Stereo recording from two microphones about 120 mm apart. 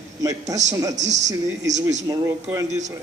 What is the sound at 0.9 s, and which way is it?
Speech, 75° right (ahead or behind).